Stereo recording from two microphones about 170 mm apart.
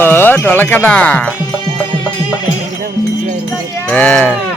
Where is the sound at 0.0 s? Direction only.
10° left (ahead or behind).